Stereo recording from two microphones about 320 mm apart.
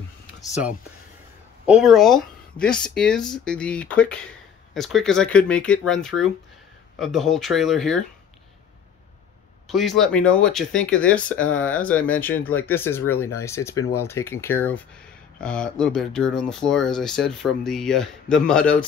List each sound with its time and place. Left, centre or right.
1.7 s speech: centre
9.7 s speech: centre